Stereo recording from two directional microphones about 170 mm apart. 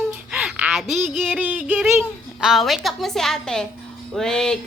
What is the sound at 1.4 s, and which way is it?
A woman's voice, 10° right (ahead or behind).